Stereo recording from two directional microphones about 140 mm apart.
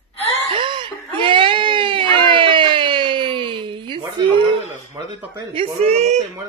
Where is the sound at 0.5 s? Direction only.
35° right (ahead or behind).